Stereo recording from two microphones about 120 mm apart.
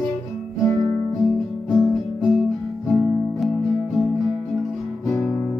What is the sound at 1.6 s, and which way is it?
Music, centre (ahead or behind).